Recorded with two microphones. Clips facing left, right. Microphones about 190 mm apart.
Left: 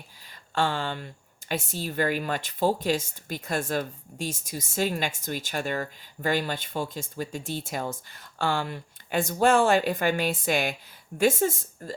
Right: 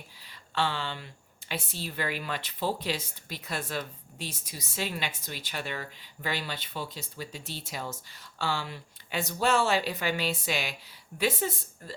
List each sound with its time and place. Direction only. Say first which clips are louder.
0.3 s speech: left 4 dB; 45° left (ahead or behind)